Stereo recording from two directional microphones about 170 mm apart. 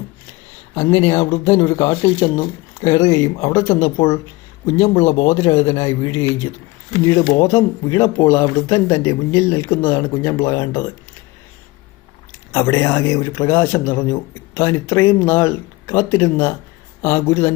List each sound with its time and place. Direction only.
0.8 s a man's voice: 15° left (ahead or behind)
12.5 s a man's voice: 15° left (ahead or behind)